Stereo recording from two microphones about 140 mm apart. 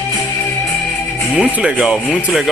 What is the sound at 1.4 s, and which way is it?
Speech, 10° right (ahead or behind).